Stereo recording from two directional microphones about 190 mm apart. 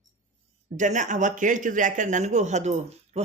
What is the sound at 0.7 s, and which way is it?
Speech, 40° right (ahead or behind).